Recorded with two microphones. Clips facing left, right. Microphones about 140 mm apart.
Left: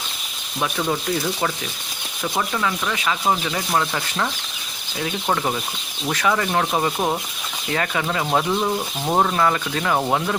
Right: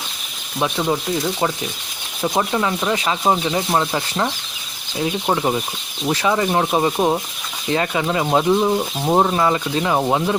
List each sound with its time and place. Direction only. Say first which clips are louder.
0.6 s speech: right 3 dB; 20° right (ahead or behind)
2.2 s speech: right 4 dB; 25° right (ahead or behind)